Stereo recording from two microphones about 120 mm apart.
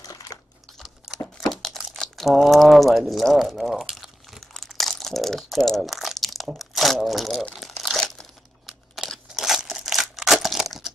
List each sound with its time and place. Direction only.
0.0 s crumpling: 30° left (ahead or behind)
0.7 s a sound: centre (ahead or behind)
1.8 s crumpling: centre (ahead or behind)